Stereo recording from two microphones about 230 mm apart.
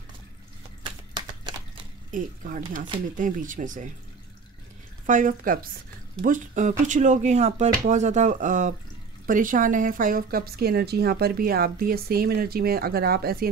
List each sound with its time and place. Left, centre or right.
2.0 s speech: right
5.0 s speech: right